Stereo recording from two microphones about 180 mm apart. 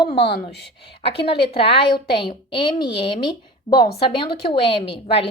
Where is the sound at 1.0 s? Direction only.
30° left (ahead or behind).